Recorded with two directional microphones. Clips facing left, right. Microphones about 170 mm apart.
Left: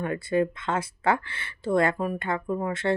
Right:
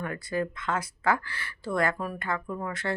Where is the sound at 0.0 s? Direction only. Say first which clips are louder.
Left 6 dB; 25° left (ahead or behind).